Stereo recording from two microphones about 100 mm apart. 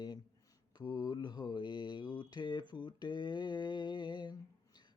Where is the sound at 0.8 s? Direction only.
40° left (ahead or behind).